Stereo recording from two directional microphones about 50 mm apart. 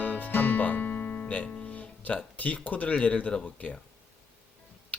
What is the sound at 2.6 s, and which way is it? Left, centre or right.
Speech, left.